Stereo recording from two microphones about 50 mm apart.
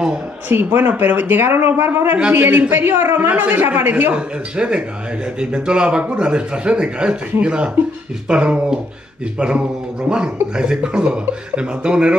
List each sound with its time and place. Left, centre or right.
0.5 s speech: right
4.1 s speech: centre